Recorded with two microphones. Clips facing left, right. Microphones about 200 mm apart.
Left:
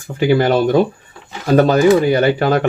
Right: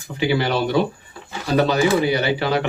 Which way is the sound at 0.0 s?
50° left (ahead or behind).